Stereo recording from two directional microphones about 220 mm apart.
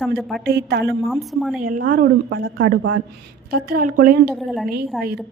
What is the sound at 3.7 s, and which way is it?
Speech, 40° right (ahead or behind).